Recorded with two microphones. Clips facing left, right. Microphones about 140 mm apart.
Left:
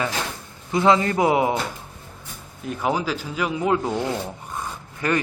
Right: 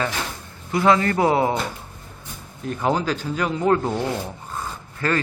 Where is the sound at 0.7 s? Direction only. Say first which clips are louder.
Even; 20° left (ahead or behind).